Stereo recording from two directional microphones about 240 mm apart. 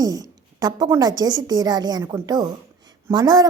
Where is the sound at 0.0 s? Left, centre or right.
Centre.